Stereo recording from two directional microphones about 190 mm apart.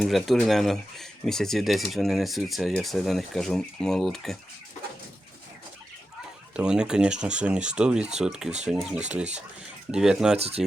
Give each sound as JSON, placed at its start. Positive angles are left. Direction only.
{"t": 0.0, "sound": "speech", "side_deg": 0}
{"t": 6.5, "sound": "speech", "side_deg": -5}
{"t": 10.3, "sound": "speech", "side_deg": -35}